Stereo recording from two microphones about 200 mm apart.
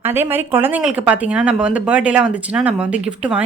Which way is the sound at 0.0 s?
10° right (ahead or behind).